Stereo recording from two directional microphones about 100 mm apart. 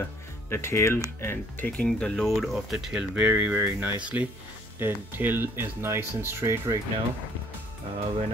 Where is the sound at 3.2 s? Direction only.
20° right (ahead or behind).